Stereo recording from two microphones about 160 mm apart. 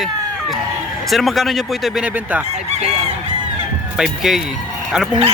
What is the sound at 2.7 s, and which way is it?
Goose, 45° right (ahead or behind).